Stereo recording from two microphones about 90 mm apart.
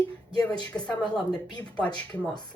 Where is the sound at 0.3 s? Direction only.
55° left (ahead or behind).